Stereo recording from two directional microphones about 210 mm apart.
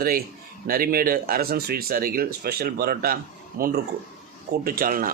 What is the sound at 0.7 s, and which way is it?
Speech, 45° right (ahead or behind).